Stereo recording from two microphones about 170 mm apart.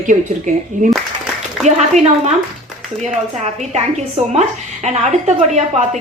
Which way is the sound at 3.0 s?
40° right (ahead or behind).